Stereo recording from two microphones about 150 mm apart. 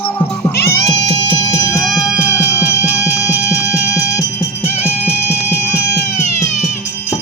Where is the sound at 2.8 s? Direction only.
10° right (ahead or behind).